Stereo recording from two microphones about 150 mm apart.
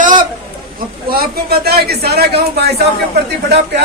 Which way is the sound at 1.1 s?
90° right.